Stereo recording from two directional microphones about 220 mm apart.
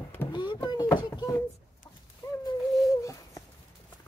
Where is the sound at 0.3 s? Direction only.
20° left (ahead or behind).